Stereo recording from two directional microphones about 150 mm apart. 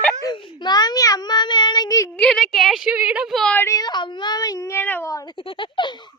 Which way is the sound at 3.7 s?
25° left (ahead or behind).